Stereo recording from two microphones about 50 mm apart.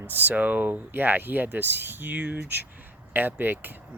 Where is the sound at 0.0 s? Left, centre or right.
Right.